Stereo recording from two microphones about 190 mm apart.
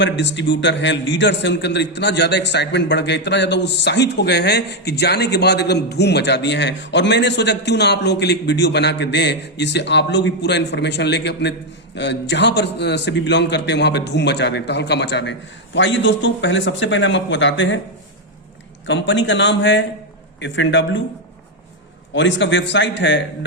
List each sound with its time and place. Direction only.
0.0 s a man's voice: 65° left (ahead or behind)
18.9 s a man's voice: 70° left (ahead or behind)
22.1 s a man's voice: 70° left (ahead or behind)